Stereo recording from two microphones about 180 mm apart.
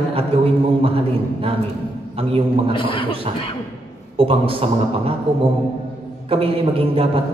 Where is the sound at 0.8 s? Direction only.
30° right (ahead or behind).